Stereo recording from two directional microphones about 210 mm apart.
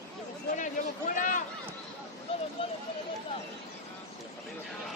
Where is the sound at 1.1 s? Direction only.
40° left (ahead or behind).